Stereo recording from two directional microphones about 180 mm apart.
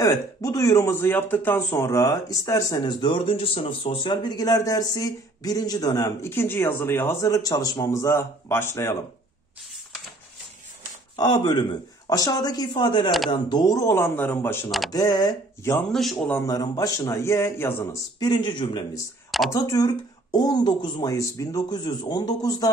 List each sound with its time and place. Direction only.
0.0 s speech: 15° left (ahead or behind)
11.1 s speech: 20° left (ahead or behind)
15.9 s a man's voice: centre (ahead or behind)
16.3 s speech: 20° left (ahead or behind)